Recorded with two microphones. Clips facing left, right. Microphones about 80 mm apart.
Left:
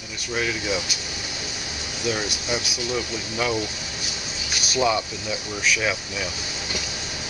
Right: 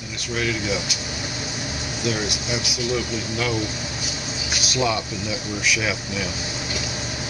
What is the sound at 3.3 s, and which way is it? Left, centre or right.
Speech, centre.